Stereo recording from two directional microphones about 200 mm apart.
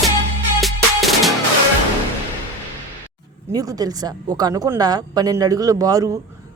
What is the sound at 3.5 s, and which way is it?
A man's voice, 20° right (ahead or behind).